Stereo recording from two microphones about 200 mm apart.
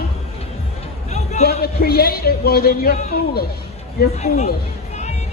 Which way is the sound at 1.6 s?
50° left (ahead or behind).